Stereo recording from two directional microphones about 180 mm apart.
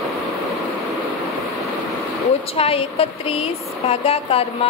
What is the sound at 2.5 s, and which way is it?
Speech, 30° left (ahead or behind).